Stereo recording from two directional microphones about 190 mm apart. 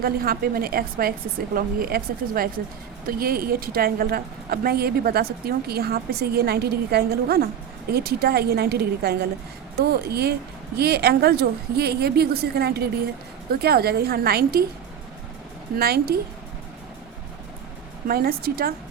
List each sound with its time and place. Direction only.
0.0 s a woman's voice: 50° right (ahead or behind)
15.8 s a woman's voice: 55° right (ahead or behind)
18.1 s a woman's voice: 50° right (ahead or behind)